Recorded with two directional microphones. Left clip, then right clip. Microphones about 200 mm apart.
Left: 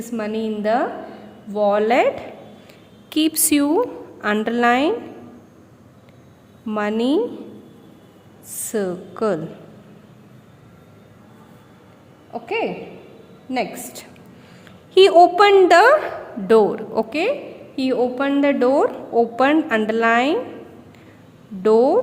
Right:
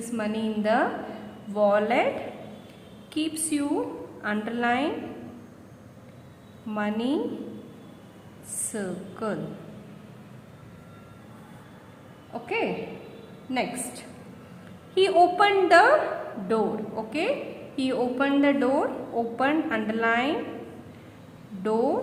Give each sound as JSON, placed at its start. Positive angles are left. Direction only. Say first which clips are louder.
{"t": 0.0, "sound": "a woman's voice", "louder": "left 5 dB", "side_deg": 40}
{"t": 3.1, "sound": "a woman's voice", "louder": "left 10 dB", "side_deg": 50}
{"t": 6.7, "sound": "a woman's voice", "louder": "left 8 dB", "side_deg": 45}
{"t": 8.7, "sound": "a woman's voice", "louder": "left 11 dB", "side_deg": 45}
{"t": 12.3, "sound": "a woman's voice", "louder": "left 5 dB", "side_deg": 35}
{"t": 14.9, "sound": "a woman's voice", "louder": "left 9 dB", "side_deg": 50}
{"t": 21.6, "sound": "a woman's voice", "louder": "left 10 dB", "side_deg": 45}